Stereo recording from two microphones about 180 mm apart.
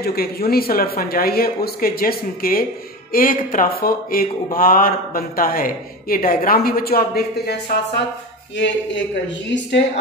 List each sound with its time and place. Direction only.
0.0 s speech: 60° left (ahead or behind)
8.5 s a woman's voice: 90° left